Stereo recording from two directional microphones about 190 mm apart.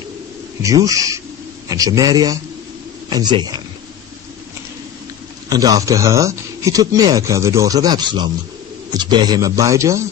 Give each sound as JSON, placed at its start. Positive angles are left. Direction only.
{"t": 0.6, "sound": "speech", "side_deg": -20}
{"t": 5.5, "sound": "speech", "side_deg": -20}